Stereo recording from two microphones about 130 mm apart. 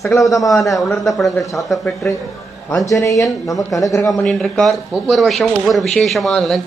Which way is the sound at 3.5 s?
Centre (ahead or behind).